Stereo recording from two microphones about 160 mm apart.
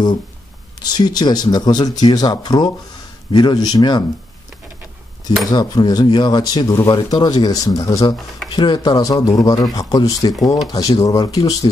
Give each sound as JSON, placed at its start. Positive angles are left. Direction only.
{"t": 0.8, "sound": "speech", "side_deg": 25}
{"t": 5.5, "sound": "speech", "side_deg": 25}